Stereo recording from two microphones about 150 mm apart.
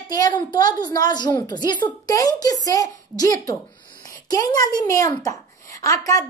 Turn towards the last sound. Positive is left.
turn(degrees=20)  # may be behind; listen again after turning